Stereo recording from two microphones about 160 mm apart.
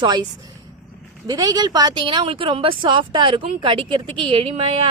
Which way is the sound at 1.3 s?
25° right (ahead or behind).